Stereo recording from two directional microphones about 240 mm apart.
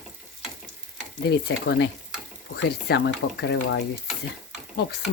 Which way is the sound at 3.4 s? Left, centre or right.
Left.